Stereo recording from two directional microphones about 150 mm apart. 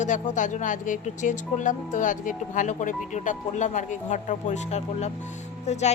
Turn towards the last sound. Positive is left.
turn(degrees=50)  # may be behind; listen again after turning